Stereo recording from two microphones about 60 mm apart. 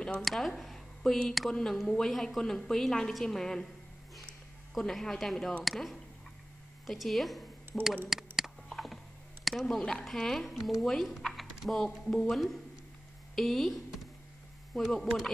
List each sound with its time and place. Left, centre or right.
0.2 s a woman's voice: centre
4.7 s a woman's voice: centre
8.1 s a sound: centre
8.7 s typing: centre
9.8 s a woman's voice: centre